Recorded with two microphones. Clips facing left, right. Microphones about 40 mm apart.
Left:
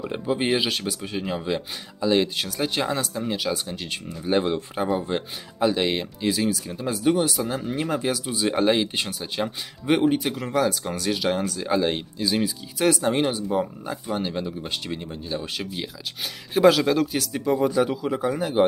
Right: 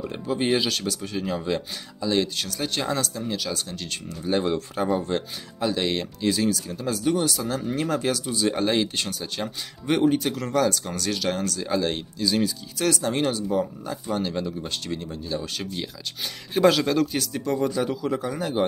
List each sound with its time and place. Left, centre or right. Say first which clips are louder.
0.0 s speech: left 1 dB; centre